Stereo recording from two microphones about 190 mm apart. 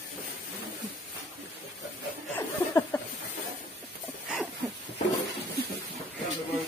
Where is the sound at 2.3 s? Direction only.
10° left (ahead or behind).